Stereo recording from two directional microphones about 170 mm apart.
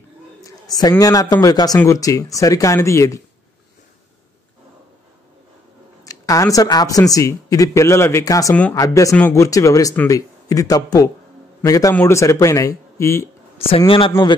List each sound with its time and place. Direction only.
0.4 s a man's voice: 20° left (ahead or behind)
6.0 s speech: 20° left (ahead or behind)
13.7 s a man's voice: 30° left (ahead or behind)